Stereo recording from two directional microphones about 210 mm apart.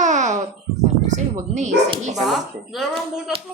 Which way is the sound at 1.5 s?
35° right (ahead or behind).